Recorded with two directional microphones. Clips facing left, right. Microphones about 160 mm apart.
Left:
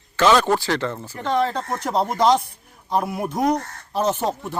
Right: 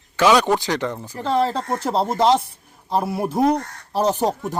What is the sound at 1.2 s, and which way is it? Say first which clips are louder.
Speech: right 1 dB; 30° right (ahead or behind).